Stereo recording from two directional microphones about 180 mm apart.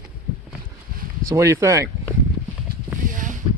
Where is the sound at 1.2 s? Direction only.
15° right (ahead or behind).